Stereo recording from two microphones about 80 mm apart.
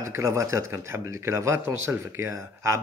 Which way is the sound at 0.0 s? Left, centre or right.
Right.